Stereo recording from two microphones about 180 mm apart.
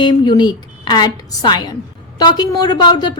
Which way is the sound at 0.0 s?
25° left (ahead or behind).